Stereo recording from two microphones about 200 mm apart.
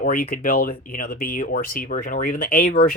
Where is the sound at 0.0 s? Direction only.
45° left (ahead or behind).